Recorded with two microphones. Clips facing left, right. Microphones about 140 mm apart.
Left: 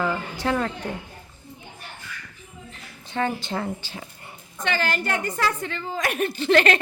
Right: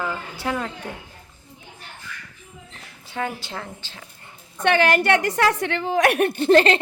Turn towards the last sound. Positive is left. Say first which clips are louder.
# right 3 dB
turn(degrees=-30)  # may be behind; listen again after turning